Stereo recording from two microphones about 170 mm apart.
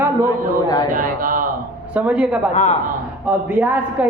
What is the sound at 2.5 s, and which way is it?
Speech, 45° left (ahead or behind).